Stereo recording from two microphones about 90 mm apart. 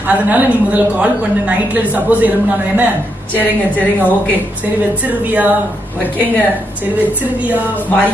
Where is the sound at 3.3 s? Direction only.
20° left (ahead or behind).